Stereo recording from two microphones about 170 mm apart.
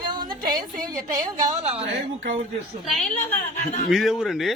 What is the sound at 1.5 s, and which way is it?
Speech, 45° right (ahead or behind).